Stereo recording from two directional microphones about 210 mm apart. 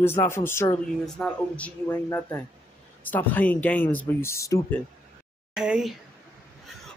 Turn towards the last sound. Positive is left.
turn(degrees=-5)  # may be behind; listen again after turning